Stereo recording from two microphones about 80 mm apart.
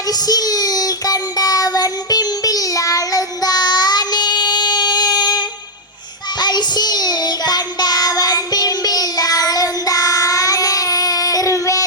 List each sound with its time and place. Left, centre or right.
0.1 s child singing: left